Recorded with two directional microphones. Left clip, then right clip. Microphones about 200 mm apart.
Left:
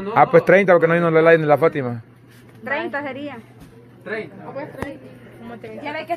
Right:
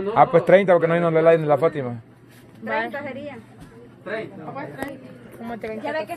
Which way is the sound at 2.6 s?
45° left (ahead or behind).